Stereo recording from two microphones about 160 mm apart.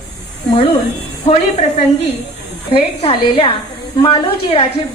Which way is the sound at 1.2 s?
45° left (ahead or behind).